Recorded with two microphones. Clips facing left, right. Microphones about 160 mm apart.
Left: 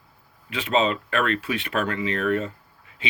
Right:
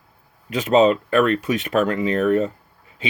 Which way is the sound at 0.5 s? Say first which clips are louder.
Right 7 dB; 40° right (ahead or behind).